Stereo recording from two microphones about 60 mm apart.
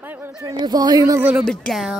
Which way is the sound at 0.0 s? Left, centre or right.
Right.